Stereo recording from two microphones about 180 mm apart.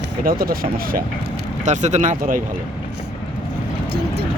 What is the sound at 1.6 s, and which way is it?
Speech, 40° right (ahead or behind).